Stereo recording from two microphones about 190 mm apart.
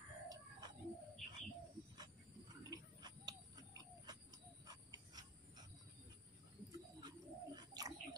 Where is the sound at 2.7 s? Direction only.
20° right (ahead or behind).